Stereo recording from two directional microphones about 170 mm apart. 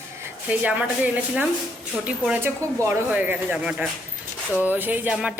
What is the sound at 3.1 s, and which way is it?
Speech, 5° right (ahead or behind).